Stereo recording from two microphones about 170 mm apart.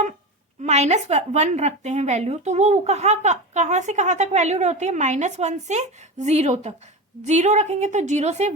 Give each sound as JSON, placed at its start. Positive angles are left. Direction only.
{"t": 0.6, "sound": "a woman's voice", "side_deg": -40}